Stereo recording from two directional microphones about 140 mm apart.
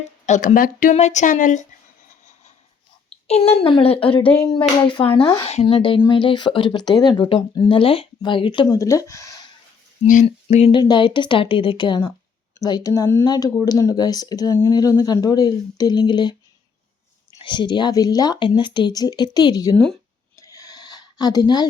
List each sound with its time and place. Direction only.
0.3 s speech: 65° left (ahead or behind)
3.2 s speech: 45° left (ahead or behind)
4.4 s speech: 25° left (ahead or behind)
8.6 s speech: 25° left (ahead or behind)
10.2 s speech: 50° left (ahead or behind)
10.8 s speech: 35° left (ahead or behind)
17.4 s speech: 35° left (ahead or behind)
19.7 s speech: 5° left (ahead or behind)
20.3 s a sound: 25° left (ahead or behind)